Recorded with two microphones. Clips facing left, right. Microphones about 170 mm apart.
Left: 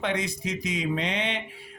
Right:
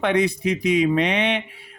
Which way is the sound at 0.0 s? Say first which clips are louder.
Right 9 dB; 60° right (ahead or behind).